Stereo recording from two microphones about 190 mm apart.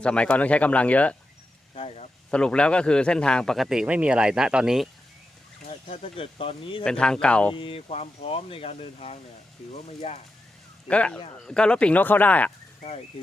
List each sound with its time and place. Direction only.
0.0 s speech: 5° left (ahead or behind)
1.7 s a sound: 30° left (ahead or behind)
2.3 s a man's voice: 5° left (ahead or behind)
5.6 s speech: 30° left (ahead or behind)
6.8 s a man's voice: 5° left (ahead or behind)
7.5 s speech: 30° left (ahead or behind)
10.8 s speech: 5° left (ahead or behind)